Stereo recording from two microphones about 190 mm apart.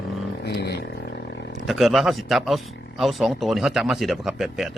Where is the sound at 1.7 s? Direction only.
Centre (ahead or behind).